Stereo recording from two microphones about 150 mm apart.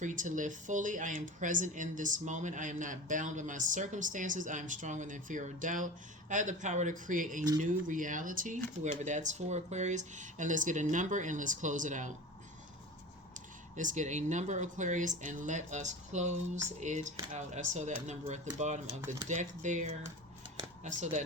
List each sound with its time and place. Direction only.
0.0 s speech: 55° right (ahead or behind)
13.3 s speech: 55° right (ahead or behind)